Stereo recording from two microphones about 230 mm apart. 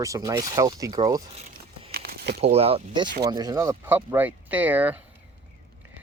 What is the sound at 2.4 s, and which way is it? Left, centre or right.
Speech, right.